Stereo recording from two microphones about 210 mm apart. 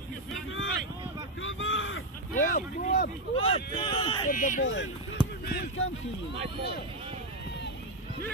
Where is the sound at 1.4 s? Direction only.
65° left (ahead or behind).